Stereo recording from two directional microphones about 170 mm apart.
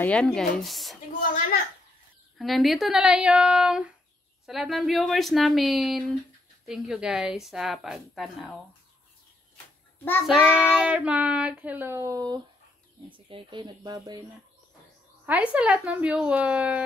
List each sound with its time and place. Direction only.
0.0 s a woman's voice: 5° left (ahead or behind)
2.3 s a woman's voice: centre (ahead or behind)
10.2 s a woman's voice: 5° right (ahead or behind); by 14.2 s 25° right (ahead or behind)
15.2 s speech: 10° right (ahead or behind)